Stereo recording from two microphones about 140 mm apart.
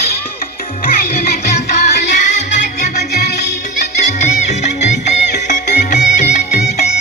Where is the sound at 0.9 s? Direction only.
90° left.